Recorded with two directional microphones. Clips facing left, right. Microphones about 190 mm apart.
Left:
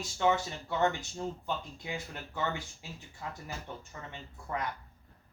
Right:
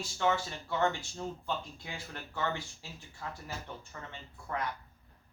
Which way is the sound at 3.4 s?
15° left (ahead or behind).